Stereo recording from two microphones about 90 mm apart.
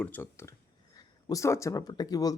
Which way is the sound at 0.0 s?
25° left (ahead or behind).